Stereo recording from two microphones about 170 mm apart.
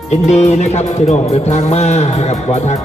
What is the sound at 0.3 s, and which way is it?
Speech, 40° left (ahead or behind).